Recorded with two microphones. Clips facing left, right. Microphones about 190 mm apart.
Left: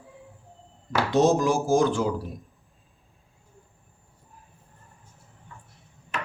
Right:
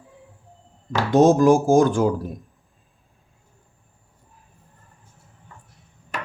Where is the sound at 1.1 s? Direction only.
50° right (ahead or behind).